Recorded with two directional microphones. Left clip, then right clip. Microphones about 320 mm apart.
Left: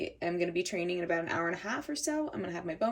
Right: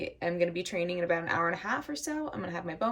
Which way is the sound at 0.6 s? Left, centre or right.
Centre.